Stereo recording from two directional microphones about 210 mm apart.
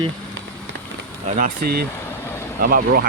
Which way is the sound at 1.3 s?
40° right (ahead or behind).